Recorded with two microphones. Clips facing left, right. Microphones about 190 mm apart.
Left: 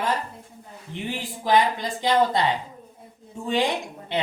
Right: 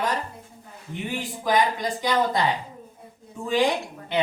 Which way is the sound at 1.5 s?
25° left (ahead or behind).